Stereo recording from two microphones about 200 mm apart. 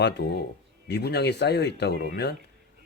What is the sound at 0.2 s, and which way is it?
Speech, 55° left (ahead or behind).